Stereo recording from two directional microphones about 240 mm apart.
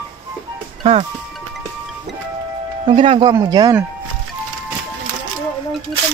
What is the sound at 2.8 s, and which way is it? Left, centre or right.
Speech, right.